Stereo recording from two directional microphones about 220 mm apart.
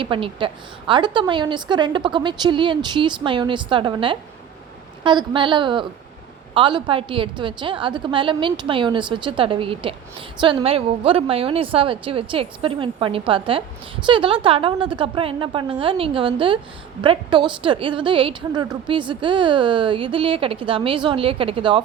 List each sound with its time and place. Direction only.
0.0 s a woman's voice: 25° right (ahead or behind)